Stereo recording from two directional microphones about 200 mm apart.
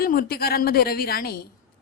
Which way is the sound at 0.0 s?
50° left (ahead or behind).